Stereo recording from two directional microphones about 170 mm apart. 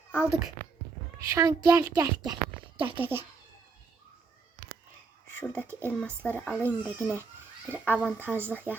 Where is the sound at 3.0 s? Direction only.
10° right (ahead or behind).